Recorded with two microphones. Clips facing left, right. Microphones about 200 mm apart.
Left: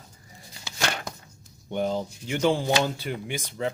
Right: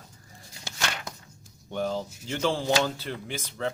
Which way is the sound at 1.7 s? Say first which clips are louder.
Left 3 dB; 15° left (ahead or behind).